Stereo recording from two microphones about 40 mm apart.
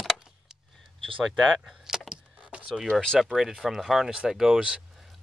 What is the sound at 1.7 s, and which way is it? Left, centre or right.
Keys jangling, centre.